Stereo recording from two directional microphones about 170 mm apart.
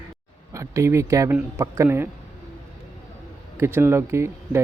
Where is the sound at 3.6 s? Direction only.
15° right (ahead or behind).